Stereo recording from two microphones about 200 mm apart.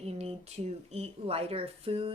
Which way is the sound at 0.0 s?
30° right (ahead or behind).